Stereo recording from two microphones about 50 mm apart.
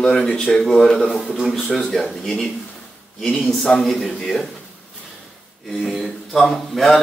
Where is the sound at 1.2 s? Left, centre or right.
Centre.